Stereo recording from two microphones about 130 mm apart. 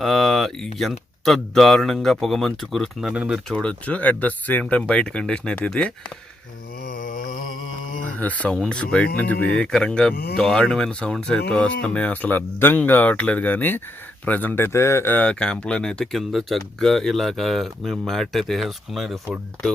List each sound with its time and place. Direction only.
0.0 s speech: centre (ahead or behind)
3.5 s speech: 10° left (ahead or behind)
6.9 s mantra: 90° left
8.2 s speech: 10° left (ahead or behind)